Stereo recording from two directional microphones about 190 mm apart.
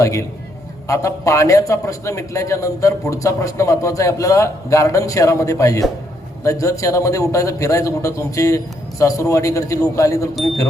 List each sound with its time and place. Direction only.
0.0 s a man's voice: 15° left (ahead or behind)